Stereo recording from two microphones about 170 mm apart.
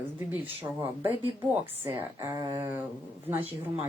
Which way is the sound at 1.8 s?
15° right (ahead or behind).